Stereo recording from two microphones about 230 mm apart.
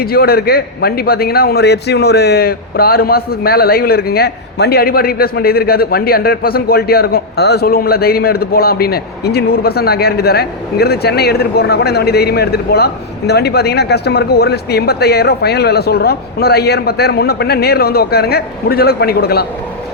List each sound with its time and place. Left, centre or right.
0.0 s a man's voice: left